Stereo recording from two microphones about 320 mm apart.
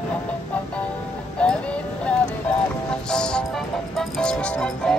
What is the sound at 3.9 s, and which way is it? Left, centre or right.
Speech, centre.